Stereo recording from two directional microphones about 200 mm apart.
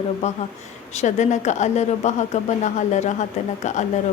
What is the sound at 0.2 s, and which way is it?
A woman's voice, 35° left (ahead or behind).